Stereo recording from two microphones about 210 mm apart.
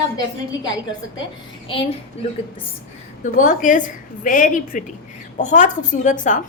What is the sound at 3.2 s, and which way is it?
A woman's voice, 40° left (ahead or behind).